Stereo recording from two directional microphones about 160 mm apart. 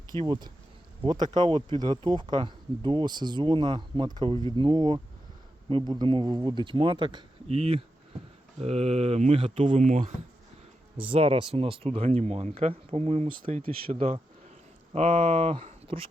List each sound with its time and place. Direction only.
0.2 s speech: 25° right (ahead or behind)
9.7 s speech: 50° right (ahead or behind)
10.9 s speech: 35° right (ahead or behind)